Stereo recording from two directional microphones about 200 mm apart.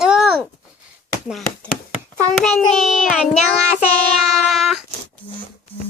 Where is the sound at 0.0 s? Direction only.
Centre (ahead or behind).